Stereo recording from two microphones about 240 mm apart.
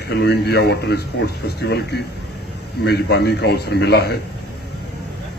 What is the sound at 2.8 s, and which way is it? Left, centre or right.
A man's voice, left.